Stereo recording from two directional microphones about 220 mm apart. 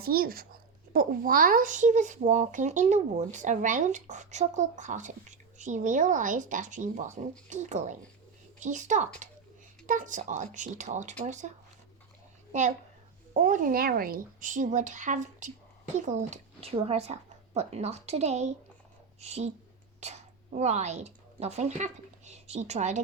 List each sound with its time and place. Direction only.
0.0 s a woman's voice: 45° right (ahead or behind)